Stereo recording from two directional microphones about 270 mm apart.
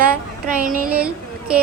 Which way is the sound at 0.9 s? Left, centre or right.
Centre.